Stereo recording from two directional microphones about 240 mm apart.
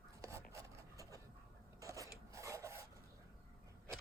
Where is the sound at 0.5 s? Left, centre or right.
Centre.